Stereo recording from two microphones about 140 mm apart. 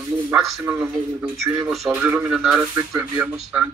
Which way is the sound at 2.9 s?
20° right (ahead or behind).